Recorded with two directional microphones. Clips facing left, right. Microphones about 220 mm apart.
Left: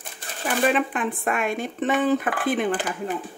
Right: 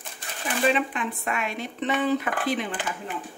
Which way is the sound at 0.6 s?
50° left (ahead or behind).